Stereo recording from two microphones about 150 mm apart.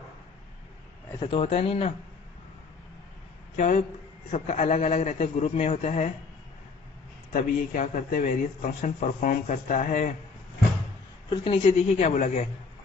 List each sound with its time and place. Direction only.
1.2 s speech: 40° left (ahead or behind)
3.6 s a man's voice: 55° left (ahead or behind)
7.3 s speech: 65° left (ahead or behind)
11.3 s a man's voice: 40° left (ahead or behind)